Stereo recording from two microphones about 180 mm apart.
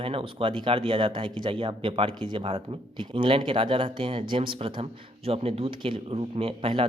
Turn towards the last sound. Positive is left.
turn(degrees=-30)  # may be behind; listen again after turning